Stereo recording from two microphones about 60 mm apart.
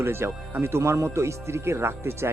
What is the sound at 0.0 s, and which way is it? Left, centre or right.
Speech, right.